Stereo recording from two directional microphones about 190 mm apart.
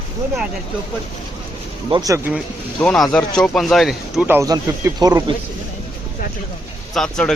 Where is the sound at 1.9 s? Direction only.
20° right (ahead or behind).